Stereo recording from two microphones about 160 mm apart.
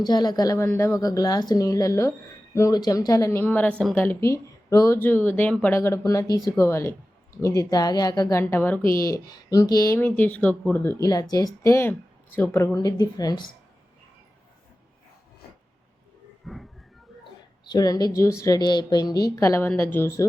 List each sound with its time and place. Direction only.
0.0 s a woman's voice: 25° left (ahead or behind); by 10.9 s 10° left (ahead or behind)
11.0 s speech: 25° left (ahead or behind)
16.4 s a sound: centre (ahead or behind)
17.7 s a woman's voice: 25° left (ahead or behind)